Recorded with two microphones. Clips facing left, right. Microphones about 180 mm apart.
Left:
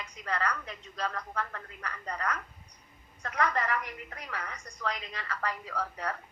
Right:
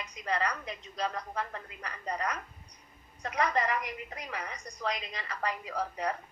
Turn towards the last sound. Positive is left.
turn(degrees=-15)  # may be behind; listen again after turning